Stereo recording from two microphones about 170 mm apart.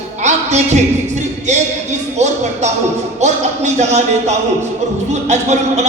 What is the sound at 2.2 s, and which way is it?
A man's voice, 40° right (ahead or behind).